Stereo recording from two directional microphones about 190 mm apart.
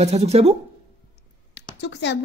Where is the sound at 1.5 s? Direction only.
65° left (ahead or behind).